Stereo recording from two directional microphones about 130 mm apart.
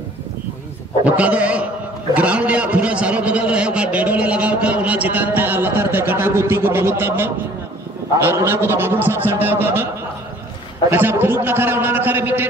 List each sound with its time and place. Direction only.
1.0 s a man's voice: 10° right (ahead or behind)
10.9 s a man's voice: 15° right (ahead or behind)